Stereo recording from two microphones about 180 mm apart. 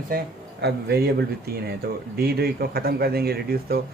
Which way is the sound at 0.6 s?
60° right (ahead or behind).